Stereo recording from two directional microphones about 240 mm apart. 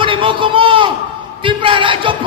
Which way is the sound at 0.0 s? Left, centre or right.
Right.